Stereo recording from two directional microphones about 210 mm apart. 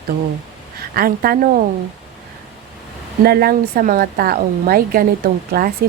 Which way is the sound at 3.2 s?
45° right (ahead or behind).